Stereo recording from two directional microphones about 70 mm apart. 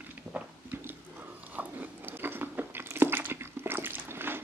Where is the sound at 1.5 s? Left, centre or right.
Right.